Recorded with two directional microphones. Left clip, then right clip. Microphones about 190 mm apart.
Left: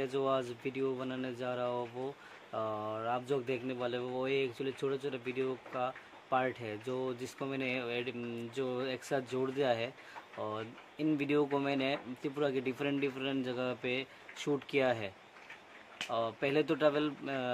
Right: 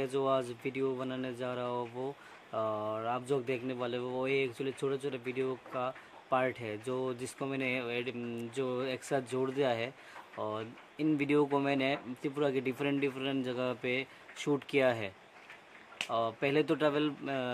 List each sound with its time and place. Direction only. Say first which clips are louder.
0.0 s speech: right 2 dB; 15° right (ahead or behind)